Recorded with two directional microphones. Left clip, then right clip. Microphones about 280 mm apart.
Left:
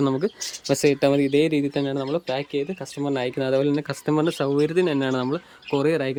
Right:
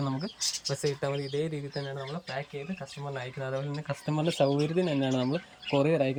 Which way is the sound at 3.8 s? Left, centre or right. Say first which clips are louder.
Left 10 dB; left.